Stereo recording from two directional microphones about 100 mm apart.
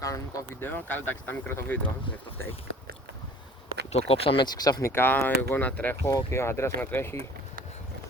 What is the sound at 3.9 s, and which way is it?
Speech, 85° left.